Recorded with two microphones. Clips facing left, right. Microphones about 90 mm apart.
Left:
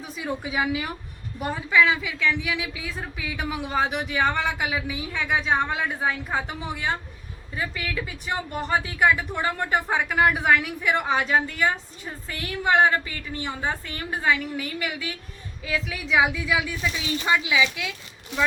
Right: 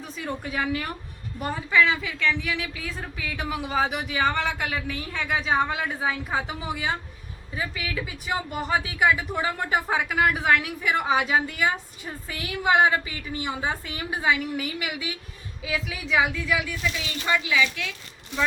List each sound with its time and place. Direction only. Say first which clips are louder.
0.0 s a woman's voice: left 2 dB; 5° left (ahead or behind)